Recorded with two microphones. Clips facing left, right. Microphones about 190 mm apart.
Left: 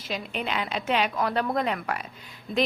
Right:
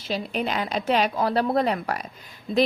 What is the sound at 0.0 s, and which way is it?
A woman's voice, 35° right (ahead or behind).